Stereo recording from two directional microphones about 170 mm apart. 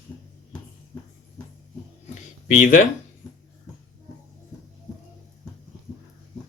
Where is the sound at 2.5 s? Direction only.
50° left (ahead or behind).